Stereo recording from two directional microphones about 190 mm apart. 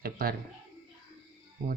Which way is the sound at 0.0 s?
50° right (ahead or behind).